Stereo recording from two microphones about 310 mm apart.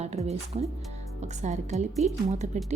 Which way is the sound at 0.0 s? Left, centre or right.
Right.